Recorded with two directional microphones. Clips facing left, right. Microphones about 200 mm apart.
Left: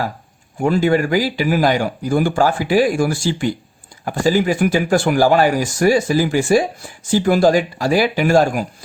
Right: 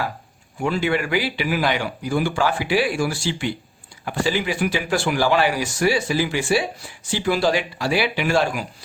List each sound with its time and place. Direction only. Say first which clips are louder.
0.6 s speech: left 6 dB; 45° left (ahead or behind)